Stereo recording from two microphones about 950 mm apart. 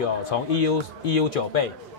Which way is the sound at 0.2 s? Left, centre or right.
Left.